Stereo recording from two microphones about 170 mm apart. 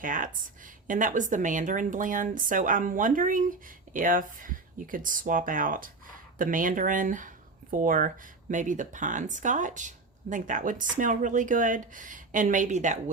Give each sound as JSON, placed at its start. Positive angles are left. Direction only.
{"t": 0.0, "sound": "speech", "side_deg": -50}